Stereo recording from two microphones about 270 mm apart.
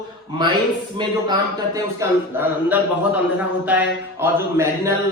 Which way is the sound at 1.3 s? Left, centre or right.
Centre.